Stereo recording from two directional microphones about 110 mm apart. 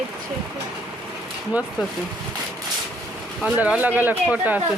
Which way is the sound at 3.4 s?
10° right (ahead or behind).